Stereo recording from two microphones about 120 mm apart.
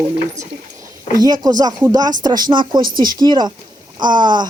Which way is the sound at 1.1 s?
30° right (ahead or behind).